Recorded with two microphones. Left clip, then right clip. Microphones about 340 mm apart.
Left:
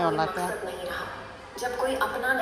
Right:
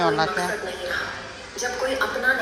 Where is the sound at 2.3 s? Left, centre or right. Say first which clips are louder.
Right 5 dB; left.